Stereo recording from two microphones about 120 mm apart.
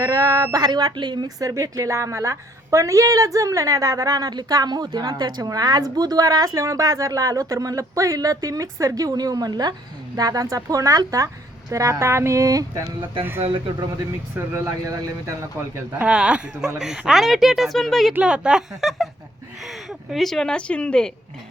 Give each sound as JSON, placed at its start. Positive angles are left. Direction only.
{"t": 0.0, "sound": "speech", "side_deg": -30}
{"t": 14.3, "sound": "a woman's voice", "side_deg": -20}
{"t": 15.9, "sound": "a woman's voice", "side_deg": -10}